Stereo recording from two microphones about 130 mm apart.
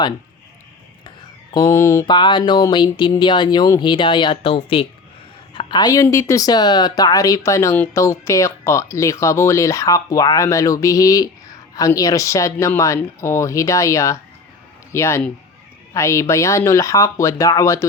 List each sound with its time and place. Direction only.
1.7 s speech: 20° left (ahead or behind)
2.0 s speech: 35° left (ahead or behind)
5.5 s speech: 35° left (ahead or behind)